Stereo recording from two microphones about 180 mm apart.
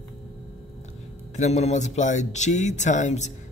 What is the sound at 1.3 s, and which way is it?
Speech, 40° left (ahead or behind).